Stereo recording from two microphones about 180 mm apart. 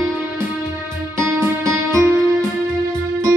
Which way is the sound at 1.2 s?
15° right (ahead or behind).